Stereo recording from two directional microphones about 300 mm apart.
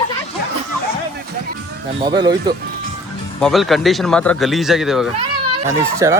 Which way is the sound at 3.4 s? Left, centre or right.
Centre.